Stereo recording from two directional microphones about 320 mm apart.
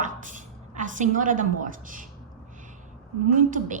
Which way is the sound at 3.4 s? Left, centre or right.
Right.